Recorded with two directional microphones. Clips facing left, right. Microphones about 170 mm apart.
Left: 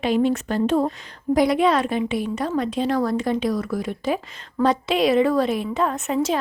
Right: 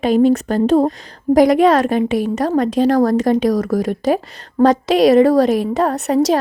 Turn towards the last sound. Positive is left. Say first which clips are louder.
# right 7 dB
turn(degrees=-40)  # may be behind; listen again after turning